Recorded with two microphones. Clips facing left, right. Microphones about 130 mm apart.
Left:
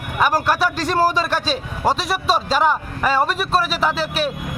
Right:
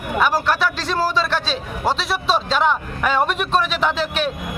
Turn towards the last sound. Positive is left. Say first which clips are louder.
# even
turn(degrees=5)  # may be behind; listen again after turning